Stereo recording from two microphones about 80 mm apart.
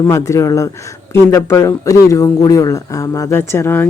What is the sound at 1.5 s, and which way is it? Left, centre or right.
Speech, left.